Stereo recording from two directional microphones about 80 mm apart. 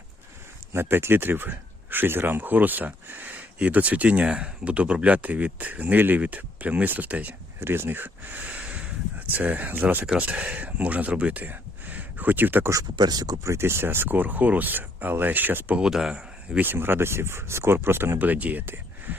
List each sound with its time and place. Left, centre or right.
0.7 s speech: right
13.0 s speech: right
13.4 s speech: right
15.8 s speech: centre
16.6 s speech: right